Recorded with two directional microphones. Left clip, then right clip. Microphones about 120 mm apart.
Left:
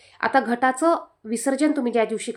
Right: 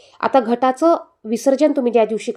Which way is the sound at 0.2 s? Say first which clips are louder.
Right 4 dB; 20° right (ahead or behind).